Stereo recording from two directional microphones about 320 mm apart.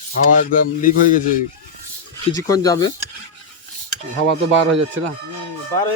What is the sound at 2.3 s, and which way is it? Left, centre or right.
Speech, centre.